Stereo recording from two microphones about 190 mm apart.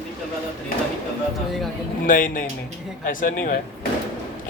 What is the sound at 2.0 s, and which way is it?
Speech, 45° left (ahead or behind).